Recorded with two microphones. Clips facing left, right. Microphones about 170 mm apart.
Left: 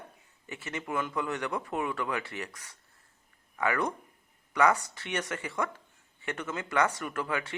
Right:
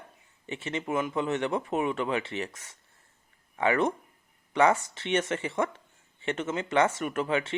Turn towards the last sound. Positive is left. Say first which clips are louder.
# right 5 dB
turn(degrees=-25)  # may be behind; listen again after turning